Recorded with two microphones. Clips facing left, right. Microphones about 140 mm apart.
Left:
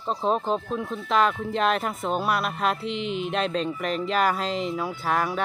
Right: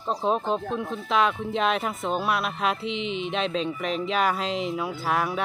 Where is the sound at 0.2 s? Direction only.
Centre (ahead or behind).